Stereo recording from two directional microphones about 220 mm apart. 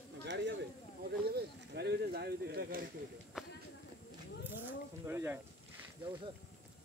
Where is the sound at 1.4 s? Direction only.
50° right (ahead or behind).